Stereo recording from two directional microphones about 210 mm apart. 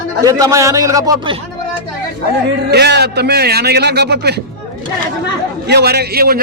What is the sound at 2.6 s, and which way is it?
A man's voice, 50° right (ahead or behind).